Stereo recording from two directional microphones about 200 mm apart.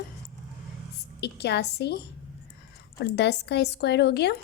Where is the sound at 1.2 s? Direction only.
55° left (ahead or behind).